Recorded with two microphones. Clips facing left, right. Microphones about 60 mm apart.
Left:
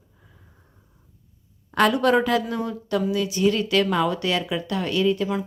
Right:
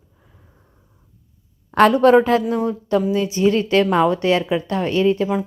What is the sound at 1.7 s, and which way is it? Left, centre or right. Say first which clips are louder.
A woman's voice: right 7 dB; right.